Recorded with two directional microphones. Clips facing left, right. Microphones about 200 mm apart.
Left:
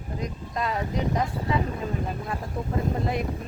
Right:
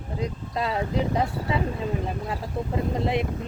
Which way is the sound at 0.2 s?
30° right (ahead or behind).